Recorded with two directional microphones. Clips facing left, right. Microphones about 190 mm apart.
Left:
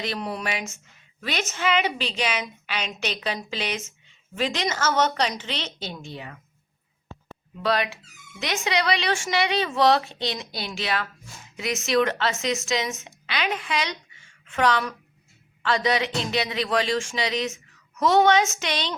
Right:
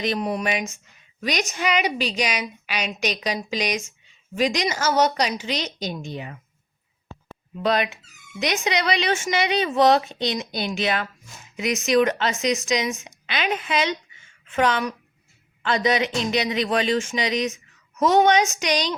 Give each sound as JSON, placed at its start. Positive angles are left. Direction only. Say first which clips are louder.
{"t": 0.0, "sound": "a woman's voice", "louder": "right 5 dB", "side_deg": -20}
{"t": 7.6, "sound": "a woman's voice", "louder": "right 2 dB", "side_deg": -20}